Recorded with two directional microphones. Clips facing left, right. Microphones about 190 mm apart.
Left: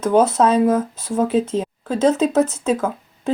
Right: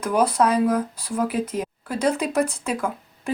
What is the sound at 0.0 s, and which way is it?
A woman's voice, 25° left (ahead or behind).